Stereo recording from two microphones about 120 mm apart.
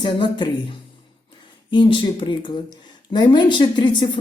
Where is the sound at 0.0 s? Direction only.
40° left (ahead or behind).